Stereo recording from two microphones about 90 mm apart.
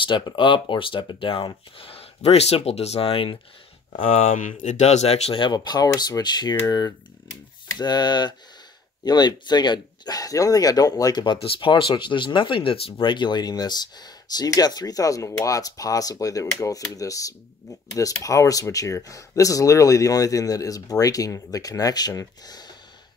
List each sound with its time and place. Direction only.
0.0 s speech: 60° left (ahead or behind); by 3.3 s 90° left
5.3 s speech: 60° left (ahead or behind)
11.2 s speech: 65° left (ahead or behind); by 22.7 s 45° left (ahead or behind)